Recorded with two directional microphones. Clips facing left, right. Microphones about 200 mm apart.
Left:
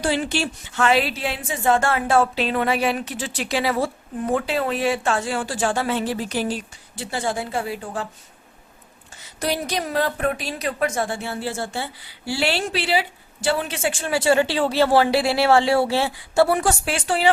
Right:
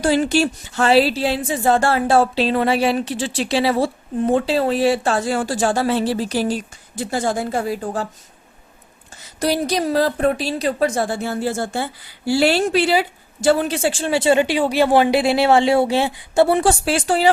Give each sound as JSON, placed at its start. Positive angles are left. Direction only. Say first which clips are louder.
{"t": 0.0, "sound": "speech", "louder": "right 6 dB", "side_deg": -40}
{"t": 9.4, "sound": "speech", "louder": "right 5 dB", "side_deg": -35}